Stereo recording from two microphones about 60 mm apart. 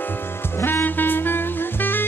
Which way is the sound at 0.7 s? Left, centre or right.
Left.